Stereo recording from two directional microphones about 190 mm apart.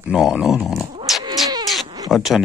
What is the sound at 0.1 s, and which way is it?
Dog, 5° right (ahead or behind).